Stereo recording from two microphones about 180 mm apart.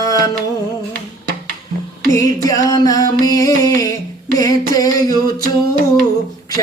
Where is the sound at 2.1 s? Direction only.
20° left (ahead or behind).